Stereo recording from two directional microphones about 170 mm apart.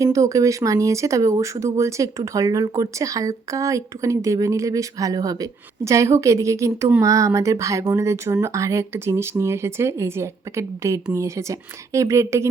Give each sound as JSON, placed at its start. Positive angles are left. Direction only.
{"t": 0.0, "sound": "speech", "side_deg": -20}